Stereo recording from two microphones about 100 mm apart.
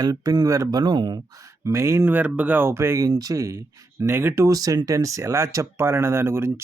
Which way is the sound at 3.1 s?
40° right (ahead or behind).